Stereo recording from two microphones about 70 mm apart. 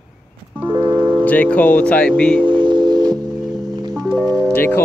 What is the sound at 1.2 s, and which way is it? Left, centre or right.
Speech, left.